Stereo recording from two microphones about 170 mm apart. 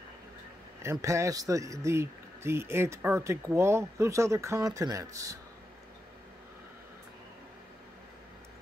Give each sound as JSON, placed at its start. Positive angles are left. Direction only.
{"t": 0.8, "sound": "speech", "side_deg": -15}